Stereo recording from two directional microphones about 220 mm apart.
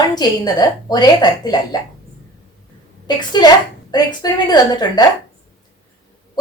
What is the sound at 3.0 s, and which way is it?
A woman's voice, 20° left (ahead or behind).